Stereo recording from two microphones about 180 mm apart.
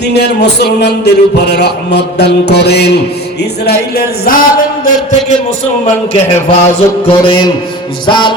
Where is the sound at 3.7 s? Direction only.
60° left (ahead or behind).